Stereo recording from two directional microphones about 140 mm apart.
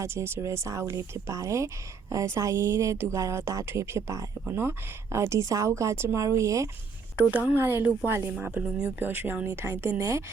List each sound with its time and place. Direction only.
0.0 s speech: 20° right (ahead or behind)